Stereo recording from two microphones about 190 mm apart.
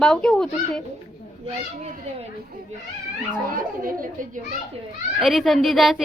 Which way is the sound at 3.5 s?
50° right (ahead or behind).